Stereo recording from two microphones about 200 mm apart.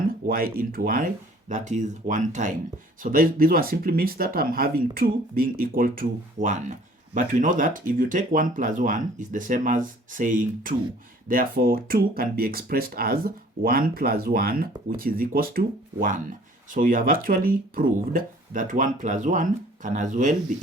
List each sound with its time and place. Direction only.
0.3 s speech: 45° right (ahead or behind)